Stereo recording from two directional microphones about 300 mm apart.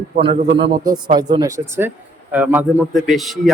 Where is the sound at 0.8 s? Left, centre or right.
Centre.